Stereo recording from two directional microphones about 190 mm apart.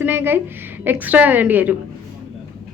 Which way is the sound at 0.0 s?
10° right (ahead or behind).